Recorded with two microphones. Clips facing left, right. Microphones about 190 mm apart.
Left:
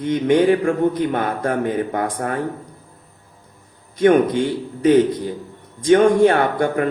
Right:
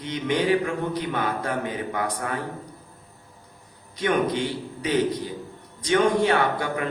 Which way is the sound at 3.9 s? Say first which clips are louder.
Left 9 dB; 50° left (ahead or behind).